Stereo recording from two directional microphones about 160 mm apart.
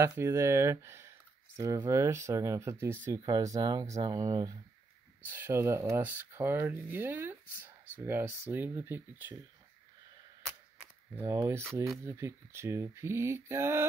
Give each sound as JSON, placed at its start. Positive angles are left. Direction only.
{"t": 0.0, "sound": "speech", "side_deg": -15}
{"t": 10.8, "sound": "speech", "side_deg": -15}